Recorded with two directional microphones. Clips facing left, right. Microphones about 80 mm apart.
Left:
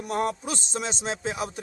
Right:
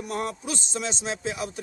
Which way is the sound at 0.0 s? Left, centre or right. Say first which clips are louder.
Left 3 dB; left.